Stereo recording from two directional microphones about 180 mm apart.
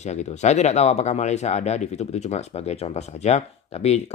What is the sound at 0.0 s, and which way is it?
Speech, 40° left (ahead or behind).